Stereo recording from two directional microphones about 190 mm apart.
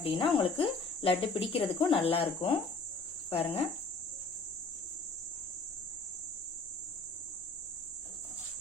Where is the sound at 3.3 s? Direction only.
30° left (ahead or behind).